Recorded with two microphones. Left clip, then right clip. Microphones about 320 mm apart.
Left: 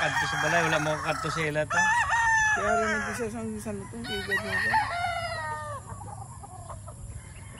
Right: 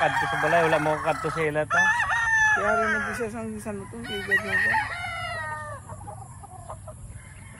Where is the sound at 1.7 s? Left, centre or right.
Left.